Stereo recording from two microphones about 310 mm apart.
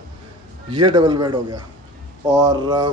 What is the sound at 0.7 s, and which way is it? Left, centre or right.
Speech, centre.